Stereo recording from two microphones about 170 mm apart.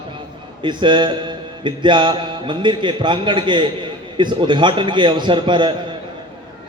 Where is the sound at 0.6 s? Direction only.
30° right (ahead or behind).